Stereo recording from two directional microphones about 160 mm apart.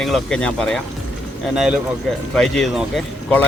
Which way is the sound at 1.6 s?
5° right (ahead or behind).